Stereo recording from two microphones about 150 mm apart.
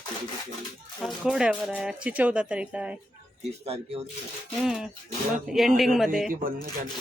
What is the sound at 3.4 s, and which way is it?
Speech, 40° right (ahead or behind).